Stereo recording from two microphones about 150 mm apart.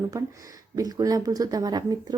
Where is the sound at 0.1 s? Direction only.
20° right (ahead or behind).